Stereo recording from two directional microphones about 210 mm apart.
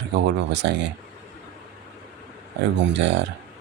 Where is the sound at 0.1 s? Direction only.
55° right (ahead or behind).